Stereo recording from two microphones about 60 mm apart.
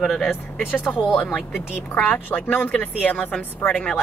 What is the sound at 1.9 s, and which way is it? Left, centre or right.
Speech, left.